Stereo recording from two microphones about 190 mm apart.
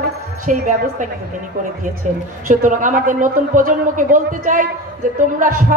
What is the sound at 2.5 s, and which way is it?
A man's voice, 45° right (ahead or behind).